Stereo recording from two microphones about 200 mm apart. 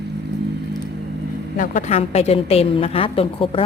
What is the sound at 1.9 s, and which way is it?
A woman's voice, 30° left (ahead or behind).